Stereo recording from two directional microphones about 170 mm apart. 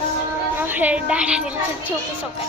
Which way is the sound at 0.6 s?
10° right (ahead or behind).